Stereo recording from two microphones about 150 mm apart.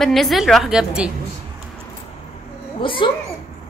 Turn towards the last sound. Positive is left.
turn(degrees=35)  # may be behind; listen again after turning